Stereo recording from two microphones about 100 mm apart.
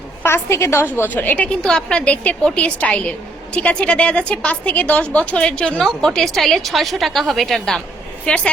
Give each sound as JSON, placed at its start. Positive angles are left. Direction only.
{"t": 0.2, "sound": "a woman's voice", "side_deg": 25}
{"t": 1.6, "sound": "a woman's voice", "side_deg": 5}